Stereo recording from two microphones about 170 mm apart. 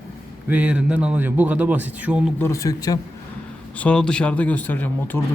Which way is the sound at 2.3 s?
15° left (ahead or behind).